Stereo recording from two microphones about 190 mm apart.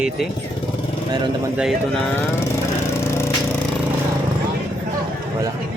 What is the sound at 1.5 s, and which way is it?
Speech, centre (ahead or behind).